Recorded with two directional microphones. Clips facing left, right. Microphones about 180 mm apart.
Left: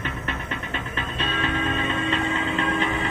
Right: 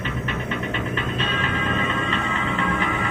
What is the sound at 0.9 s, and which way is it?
Music, 35° left (ahead or behind).